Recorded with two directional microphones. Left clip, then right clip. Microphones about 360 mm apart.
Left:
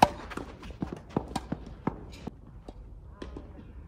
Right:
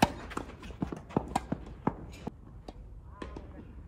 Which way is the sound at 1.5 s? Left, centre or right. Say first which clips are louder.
Right 1 dB; centre.